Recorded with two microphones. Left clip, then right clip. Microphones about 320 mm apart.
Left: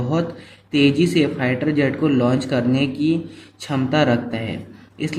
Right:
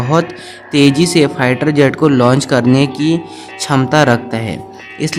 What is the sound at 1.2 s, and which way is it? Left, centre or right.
Speech, right.